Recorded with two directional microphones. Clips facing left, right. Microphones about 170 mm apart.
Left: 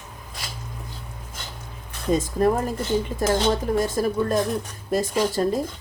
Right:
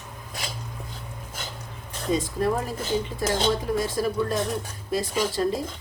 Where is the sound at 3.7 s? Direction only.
45° left (ahead or behind).